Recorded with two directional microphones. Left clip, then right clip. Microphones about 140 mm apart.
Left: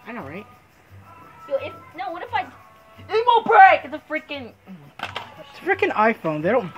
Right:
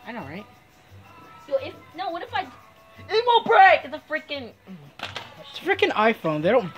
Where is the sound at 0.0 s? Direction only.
50° right (ahead or behind).